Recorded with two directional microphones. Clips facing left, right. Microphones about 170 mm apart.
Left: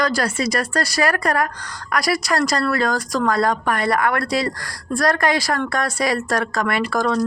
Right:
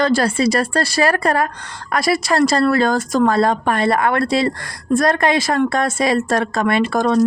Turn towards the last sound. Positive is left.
turn(degrees=-20)  # may be behind; listen again after turning